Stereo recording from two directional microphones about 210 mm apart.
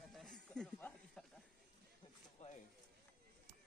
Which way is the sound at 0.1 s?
Centre (ahead or behind).